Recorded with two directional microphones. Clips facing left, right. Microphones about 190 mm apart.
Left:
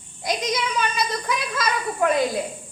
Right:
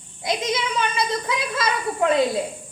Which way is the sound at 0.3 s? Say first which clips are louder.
Right 1 dB; 25° right (ahead or behind).